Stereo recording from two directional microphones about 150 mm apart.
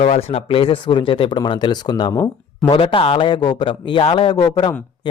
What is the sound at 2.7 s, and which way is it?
Speech, 35° left (ahead or behind).